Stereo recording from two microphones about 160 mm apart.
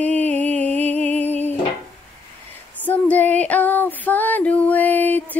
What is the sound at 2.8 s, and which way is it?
Female singing, 10° left (ahead or behind).